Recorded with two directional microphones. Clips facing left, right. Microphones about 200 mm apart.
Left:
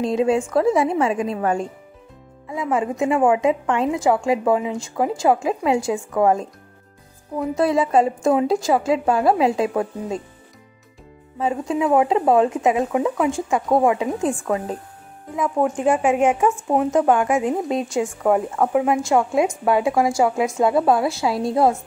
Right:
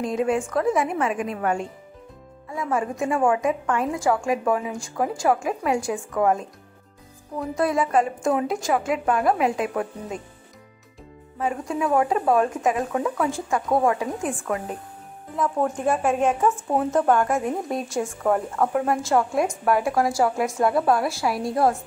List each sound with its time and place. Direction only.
0.0 s a woman's voice: 25° left (ahead or behind)
2.5 s a woman's voice: 20° left (ahead or behind)
11.3 s a woman's voice: 25° left (ahead or behind)
15.3 s speech: 15° left (ahead or behind)